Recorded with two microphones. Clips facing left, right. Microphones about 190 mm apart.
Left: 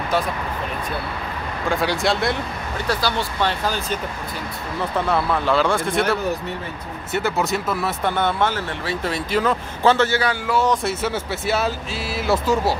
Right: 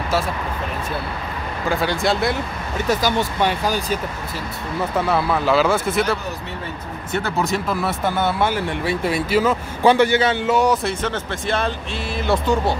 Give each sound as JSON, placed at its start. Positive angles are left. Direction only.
{"t": 1.7, "sound": "speech", "side_deg": 0}
{"t": 2.9, "sound": "speech", "side_deg": -15}
{"t": 5.1, "sound": "speech", "side_deg": -5}
{"t": 10.7, "sound": "speech", "side_deg": 0}